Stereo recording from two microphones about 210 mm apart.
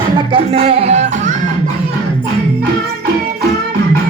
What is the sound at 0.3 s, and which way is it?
Music, 25° right (ahead or behind).